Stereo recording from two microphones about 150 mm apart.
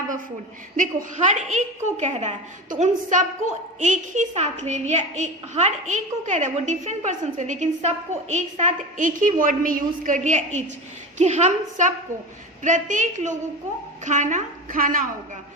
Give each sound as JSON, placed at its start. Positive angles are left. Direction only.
{"t": 0.8, "sound": "a woman's voice", "side_deg": -55}